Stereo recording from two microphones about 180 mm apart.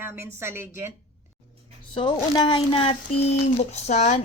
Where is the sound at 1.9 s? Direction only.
25° left (ahead or behind).